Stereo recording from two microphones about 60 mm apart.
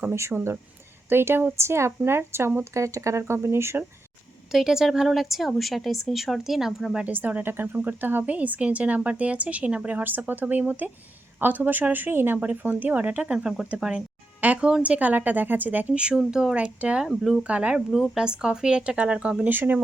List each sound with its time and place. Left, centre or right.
0.1 s speech: right
2.7 s speech: right
4.5 s a woman's voice: centre
7.1 s speech: right
13.7 s speech: centre
14.4 s speech: right
15.9 s speech: centre
17.1 s a woman's voice: centre
17.4 s speech: right
17.7 s speech: centre
19.5 s speech: right